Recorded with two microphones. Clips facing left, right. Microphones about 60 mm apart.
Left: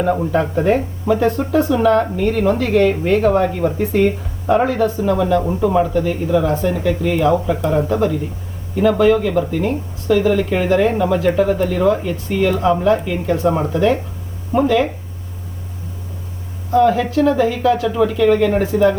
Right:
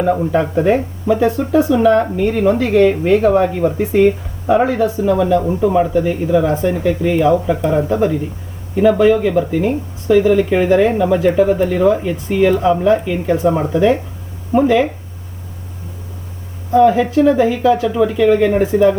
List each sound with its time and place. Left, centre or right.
0.0 s speech: centre
7.6 s speech: centre
16.7 s speech: centre